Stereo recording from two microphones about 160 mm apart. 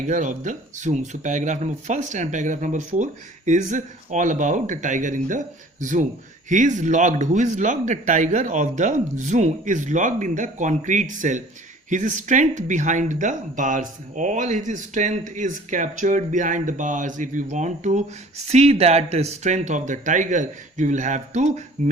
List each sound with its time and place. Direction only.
0.1 s speech: 50° right (ahead or behind)